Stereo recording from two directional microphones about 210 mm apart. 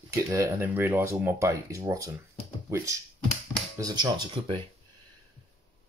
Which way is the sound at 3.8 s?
20° right (ahead or behind).